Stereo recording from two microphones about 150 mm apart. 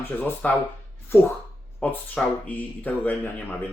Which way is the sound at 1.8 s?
10° left (ahead or behind).